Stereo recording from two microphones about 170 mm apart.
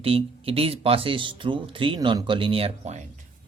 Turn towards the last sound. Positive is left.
turn(degrees=-40)  # may be behind; listen again after turning